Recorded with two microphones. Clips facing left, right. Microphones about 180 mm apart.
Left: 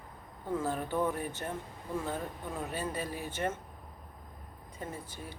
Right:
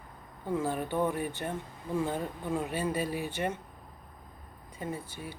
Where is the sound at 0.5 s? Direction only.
15° right (ahead or behind).